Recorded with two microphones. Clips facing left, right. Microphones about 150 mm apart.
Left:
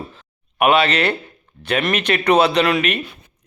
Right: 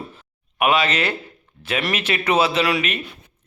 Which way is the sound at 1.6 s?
55° left (ahead or behind).